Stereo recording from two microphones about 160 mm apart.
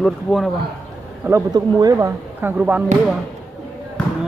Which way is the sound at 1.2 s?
20° right (ahead or behind).